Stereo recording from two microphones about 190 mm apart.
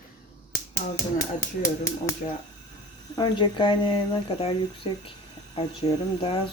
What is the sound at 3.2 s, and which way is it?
Speech, 25° left (ahead or behind).